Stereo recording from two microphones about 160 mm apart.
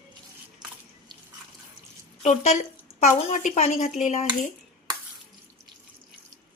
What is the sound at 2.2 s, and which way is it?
Speech, 45° left (ahead or behind).